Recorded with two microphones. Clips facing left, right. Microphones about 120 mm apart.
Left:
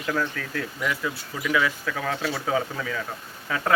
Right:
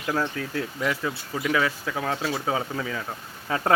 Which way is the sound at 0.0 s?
25° right (ahead or behind).